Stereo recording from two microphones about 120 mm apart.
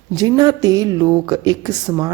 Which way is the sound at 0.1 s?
30° right (ahead or behind).